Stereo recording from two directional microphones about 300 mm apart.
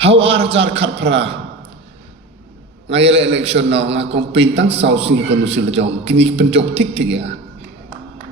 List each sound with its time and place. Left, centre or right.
0.0 s a man's voice: centre
2.9 s a man's voice: centre
3.9 s a man's voice: right
4.2 s a man's voice: centre